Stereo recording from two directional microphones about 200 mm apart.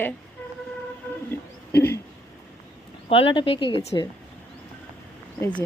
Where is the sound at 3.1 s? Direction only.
25° left (ahead or behind).